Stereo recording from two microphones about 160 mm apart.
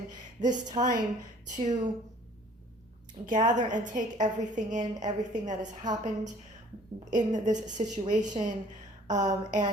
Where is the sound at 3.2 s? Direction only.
50° right (ahead or behind).